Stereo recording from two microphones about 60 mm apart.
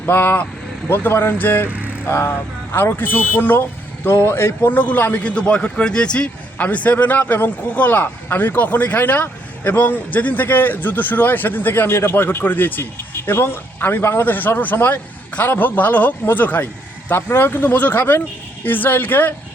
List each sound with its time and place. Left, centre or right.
0.0 s speech: left
1.7 s vehicle: right
2.0 s speech: left
2.9 s speech: left
4.7 s speech: left
5.2 s speech: centre
17.1 s speech: left